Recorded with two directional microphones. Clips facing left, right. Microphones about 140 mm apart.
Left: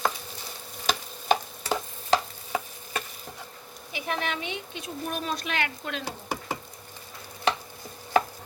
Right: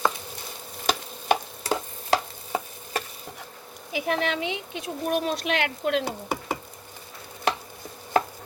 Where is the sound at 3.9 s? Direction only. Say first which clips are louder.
Right 5 dB; 90° right; by 6.5 s 60° right (ahead or behind).